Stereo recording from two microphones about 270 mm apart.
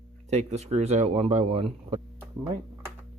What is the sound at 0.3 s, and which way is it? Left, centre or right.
Speech, right.